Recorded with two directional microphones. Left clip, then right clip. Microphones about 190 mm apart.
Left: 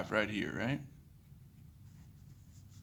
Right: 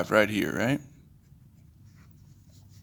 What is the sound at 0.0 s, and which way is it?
Speech, 40° right (ahead or behind).